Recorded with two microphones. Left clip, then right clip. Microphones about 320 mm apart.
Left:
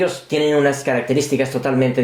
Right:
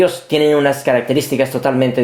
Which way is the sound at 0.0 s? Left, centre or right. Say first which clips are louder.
Right 5 dB; right.